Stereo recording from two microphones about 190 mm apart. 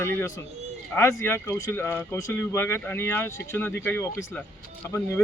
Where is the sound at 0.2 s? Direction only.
15° left (ahead or behind).